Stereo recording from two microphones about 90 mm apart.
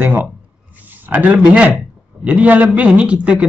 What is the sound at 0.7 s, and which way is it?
Speech, 20° right (ahead or behind).